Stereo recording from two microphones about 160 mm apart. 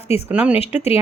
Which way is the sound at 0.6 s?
40° left (ahead or behind).